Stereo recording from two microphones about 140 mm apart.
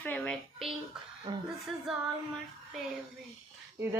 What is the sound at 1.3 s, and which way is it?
Speech, 30° right (ahead or behind).